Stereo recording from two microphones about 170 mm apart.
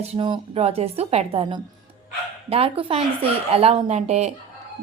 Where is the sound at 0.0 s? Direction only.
35° right (ahead or behind).